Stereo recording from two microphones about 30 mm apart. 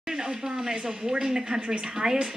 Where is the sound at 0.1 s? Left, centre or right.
Right.